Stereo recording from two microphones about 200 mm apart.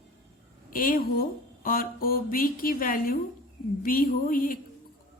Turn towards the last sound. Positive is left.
turn(degrees=45)  # may be behind; listen again after turning